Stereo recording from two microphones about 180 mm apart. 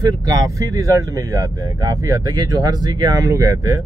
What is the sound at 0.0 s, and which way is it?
Speech, 20° right (ahead or behind).